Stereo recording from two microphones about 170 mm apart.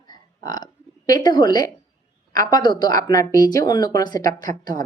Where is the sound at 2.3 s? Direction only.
20° left (ahead or behind).